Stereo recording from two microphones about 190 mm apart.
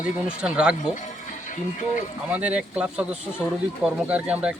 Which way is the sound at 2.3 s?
5° right (ahead or behind).